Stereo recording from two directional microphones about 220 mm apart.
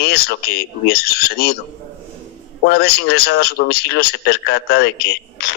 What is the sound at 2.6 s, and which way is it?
A man's voice, 45° left (ahead or behind).